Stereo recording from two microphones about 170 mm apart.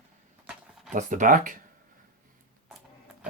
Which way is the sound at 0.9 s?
50° right (ahead or behind).